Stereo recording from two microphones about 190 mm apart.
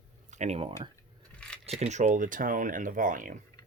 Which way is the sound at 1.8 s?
40° right (ahead or behind).